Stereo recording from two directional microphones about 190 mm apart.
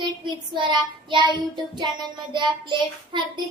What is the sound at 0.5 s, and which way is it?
A child's voice, 25° right (ahead or behind).